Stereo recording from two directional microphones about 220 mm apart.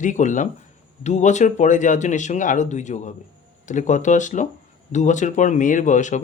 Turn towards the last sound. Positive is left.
turn(degrees=35)  # may be behind; listen again after turning